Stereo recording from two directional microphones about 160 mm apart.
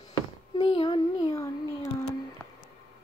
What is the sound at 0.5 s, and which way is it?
Child singing, 30° left (ahead or behind).